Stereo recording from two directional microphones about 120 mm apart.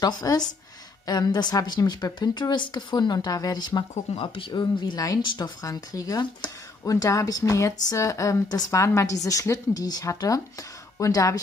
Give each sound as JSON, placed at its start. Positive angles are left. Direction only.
{"t": 0.0, "sound": "a woman's voice", "side_deg": 30}